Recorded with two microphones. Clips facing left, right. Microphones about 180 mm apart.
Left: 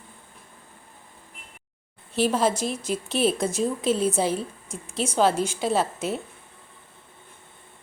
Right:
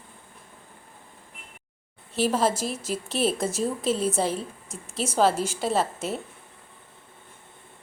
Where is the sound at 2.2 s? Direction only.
Centre (ahead or behind).